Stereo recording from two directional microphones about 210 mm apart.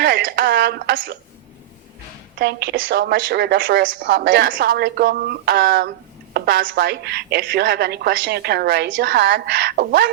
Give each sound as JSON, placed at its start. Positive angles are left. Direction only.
{"t": 0.0, "sound": "a woman's voice", "side_deg": -50}
{"t": 2.4, "sound": "a woman's voice", "side_deg": -50}